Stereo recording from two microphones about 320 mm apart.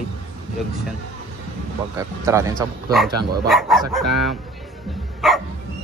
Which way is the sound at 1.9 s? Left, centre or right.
Centre.